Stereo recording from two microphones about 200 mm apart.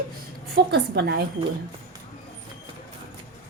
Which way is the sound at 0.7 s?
55° right (ahead or behind).